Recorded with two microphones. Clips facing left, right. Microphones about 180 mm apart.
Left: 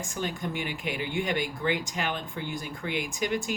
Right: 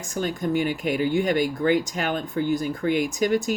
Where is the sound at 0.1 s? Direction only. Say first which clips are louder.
Right 10 dB; 45° right (ahead or behind).